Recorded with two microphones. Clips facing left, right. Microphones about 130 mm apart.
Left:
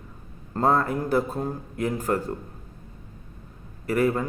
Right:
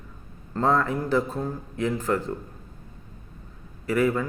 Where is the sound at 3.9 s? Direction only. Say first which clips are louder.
Even; 40° left (ahead or behind).